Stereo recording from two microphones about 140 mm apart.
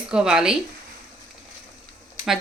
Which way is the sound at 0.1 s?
5° right (ahead or behind).